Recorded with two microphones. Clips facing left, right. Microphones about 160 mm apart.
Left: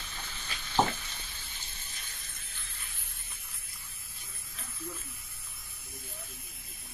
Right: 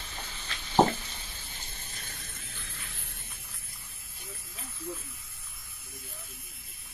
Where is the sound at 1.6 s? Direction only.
60° right (ahead or behind).